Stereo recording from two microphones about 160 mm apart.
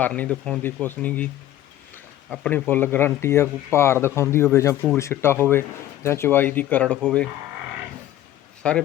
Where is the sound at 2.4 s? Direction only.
10° left (ahead or behind).